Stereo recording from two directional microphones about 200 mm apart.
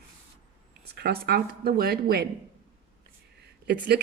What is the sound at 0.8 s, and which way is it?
Speech, 50° right (ahead or behind).